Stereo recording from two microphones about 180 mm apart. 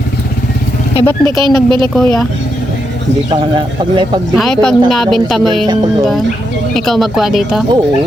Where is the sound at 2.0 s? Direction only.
5° left (ahead or behind).